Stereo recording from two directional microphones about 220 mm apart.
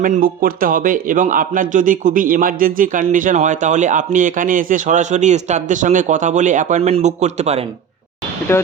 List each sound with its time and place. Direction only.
0.0 s a man's voice: 40° right (ahead or behind)
8.5 s speech: 10° left (ahead or behind)